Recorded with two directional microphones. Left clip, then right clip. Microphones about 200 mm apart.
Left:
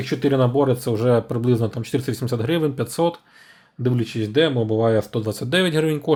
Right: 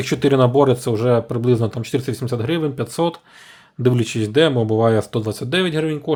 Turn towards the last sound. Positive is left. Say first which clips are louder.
# left 1 dB
turn(degrees=0)  # may be behind; listen again after turning